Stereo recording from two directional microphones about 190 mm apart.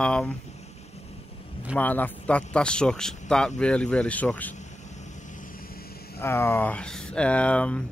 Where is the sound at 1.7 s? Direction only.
10° left (ahead or behind).